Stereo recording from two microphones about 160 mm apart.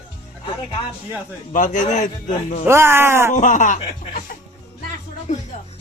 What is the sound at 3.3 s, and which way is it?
Speech, 50° left (ahead or behind).